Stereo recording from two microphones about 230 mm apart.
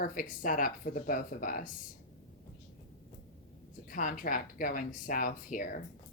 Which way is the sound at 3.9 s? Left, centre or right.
Left.